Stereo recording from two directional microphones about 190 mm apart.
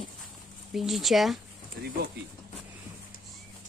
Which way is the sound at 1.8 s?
55° right (ahead or behind).